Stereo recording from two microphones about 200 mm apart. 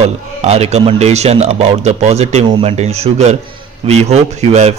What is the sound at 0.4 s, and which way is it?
A man's voice, 30° right (ahead or behind).